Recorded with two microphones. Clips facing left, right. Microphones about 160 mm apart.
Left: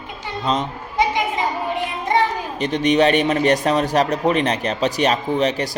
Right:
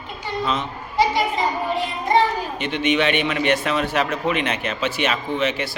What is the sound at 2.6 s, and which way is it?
A man's voice, 40° left (ahead or behind).